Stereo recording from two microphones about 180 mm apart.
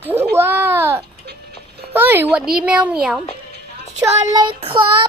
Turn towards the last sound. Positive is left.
turn(degrees=-30)  # may be behind; listen again after turning